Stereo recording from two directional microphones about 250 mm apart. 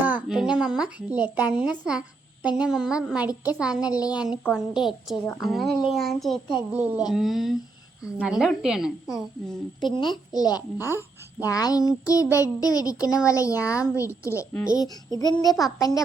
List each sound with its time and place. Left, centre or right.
0.0 s speech: centre
10.0 s a child's voice: centre
10.8 s speech: centre
11.4 s a child's voice: centre